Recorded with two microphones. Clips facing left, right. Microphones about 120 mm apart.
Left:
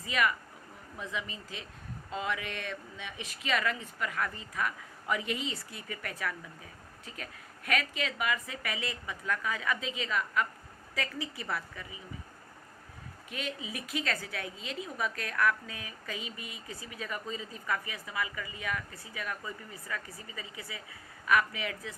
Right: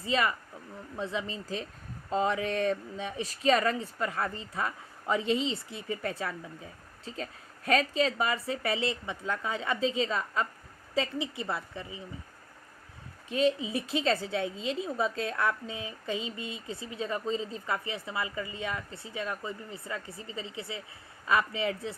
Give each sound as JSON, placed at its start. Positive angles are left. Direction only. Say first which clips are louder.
{"t": 0.0, "sound": "a woman's voice", "louder": "right 2 dB", "side_deg": -30}
{"t": 13.2, "sound": "a woman's voice", "louder": "right 12 dB", "side_deg": -30}